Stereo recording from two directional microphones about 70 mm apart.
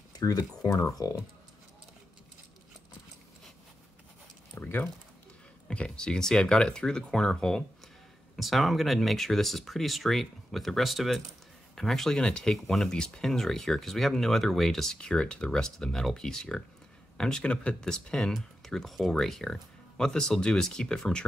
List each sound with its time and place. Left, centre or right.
0.2 s speech: left
4.6 s typing: left
5.7 s speech: centre